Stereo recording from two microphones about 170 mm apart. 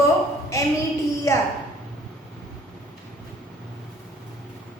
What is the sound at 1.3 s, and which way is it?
Speech, 20° left (ahead or behind).